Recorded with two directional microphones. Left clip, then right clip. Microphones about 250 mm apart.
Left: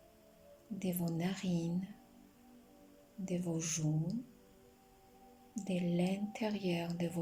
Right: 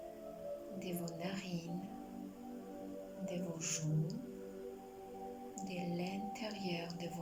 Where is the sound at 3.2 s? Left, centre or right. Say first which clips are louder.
Left 4 dB; centre.